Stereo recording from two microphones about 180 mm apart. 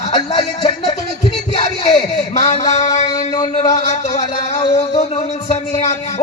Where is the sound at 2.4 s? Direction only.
40° left (ahead or behind).